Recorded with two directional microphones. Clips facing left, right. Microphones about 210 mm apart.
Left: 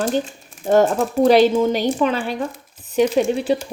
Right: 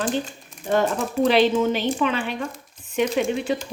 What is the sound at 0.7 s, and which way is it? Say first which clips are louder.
Speech: left 6 dB; 45° left (ahead or behind).